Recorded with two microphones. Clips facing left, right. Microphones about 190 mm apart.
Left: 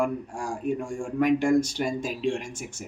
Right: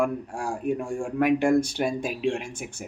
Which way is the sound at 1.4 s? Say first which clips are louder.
Right 1 dB; 60° right (ahead or behind).